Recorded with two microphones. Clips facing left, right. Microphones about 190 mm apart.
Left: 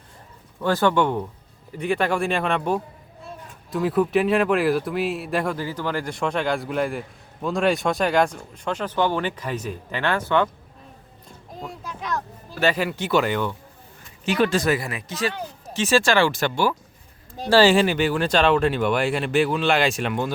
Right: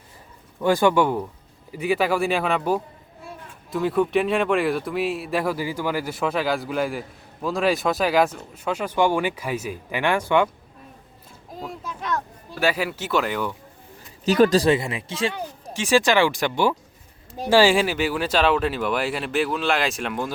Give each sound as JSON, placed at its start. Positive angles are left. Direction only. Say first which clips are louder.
{"t": 0.6, "sound": "speech", "louder": "right 2 dB", "side_deg": -15}
{"t": 11.6, "sound": "speech", "louder": "right 1 dB", "side_deg": 0}
{"t": 14.3, "sound": "speech", "louder": "right 4 dB", "side_deg": -40}
{"t": 15.3, "sound": "speech", "louder": "right 1 dB", "side_deg": -10}